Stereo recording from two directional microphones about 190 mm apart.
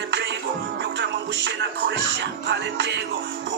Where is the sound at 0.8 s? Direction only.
65° right (ahead or behind).